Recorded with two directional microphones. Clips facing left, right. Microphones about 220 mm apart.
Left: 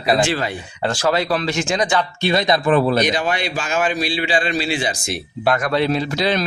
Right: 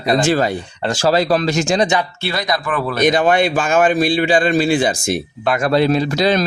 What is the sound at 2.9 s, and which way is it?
A man's voice, 50° right (ahead or behind).